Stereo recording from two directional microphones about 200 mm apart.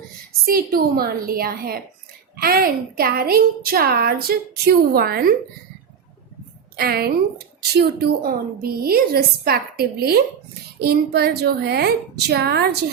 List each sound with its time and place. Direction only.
0.4 s a woman's voice: 50° right (ahead or behind)
6.7 s a woman's voice: 50° right (ahead or behind)